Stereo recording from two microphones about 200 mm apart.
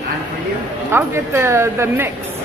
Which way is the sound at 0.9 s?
10° right (ahead or behind).